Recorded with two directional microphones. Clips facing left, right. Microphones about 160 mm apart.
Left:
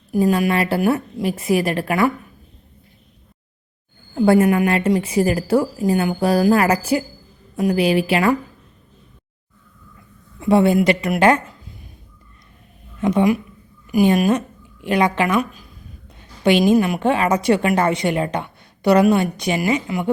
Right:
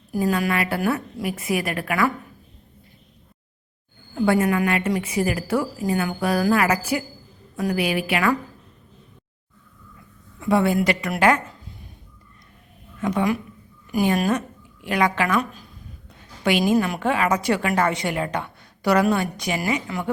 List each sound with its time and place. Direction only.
0.1 s a woman's voice: 25° left (ahead or behind)
4.1 s a woman's voice: 30° left (ahead or behind)
10.5 s a woman's voice: 25° left (ahead or behind)
13.0 s a woman's voice: 25° left (ahead or behind)
16.4 s a woman's voice: 25° left (ahead or behind)